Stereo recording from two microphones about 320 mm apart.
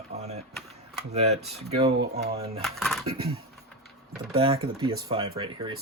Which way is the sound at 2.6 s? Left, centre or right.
Centre.